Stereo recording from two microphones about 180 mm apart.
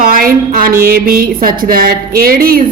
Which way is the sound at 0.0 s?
50° right (ahead or behind).